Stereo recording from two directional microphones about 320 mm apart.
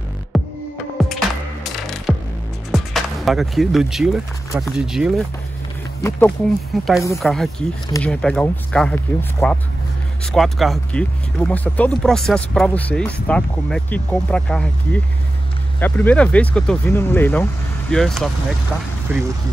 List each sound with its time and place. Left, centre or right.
0.3 s music: centre
1.6 s music: centre
2.7 s speech: centre